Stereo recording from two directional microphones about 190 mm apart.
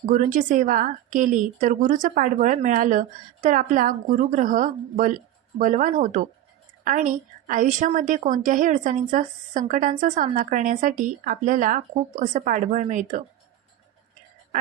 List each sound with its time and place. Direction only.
0.0 s a woman's voice: 45° right (ahead or behind)